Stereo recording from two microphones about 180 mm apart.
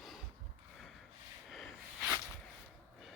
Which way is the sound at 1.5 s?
Centre (ahead or behind).